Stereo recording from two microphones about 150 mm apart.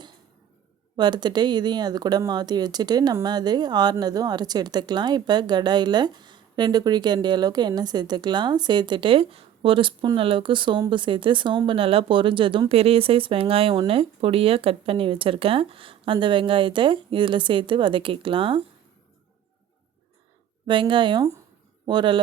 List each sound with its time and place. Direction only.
0.9 s speech: 30° right (ahead or behind)
20.7 s speech: 35° right (ahead or behind)